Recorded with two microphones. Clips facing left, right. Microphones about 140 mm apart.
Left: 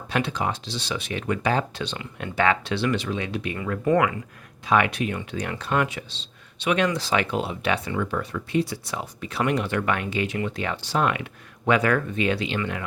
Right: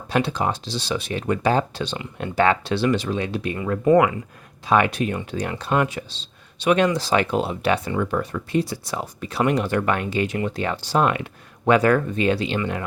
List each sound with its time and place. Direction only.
0.1 s speech: 35° right (ahead or behind)
4.7 s speech: 35° right (ahead or behind)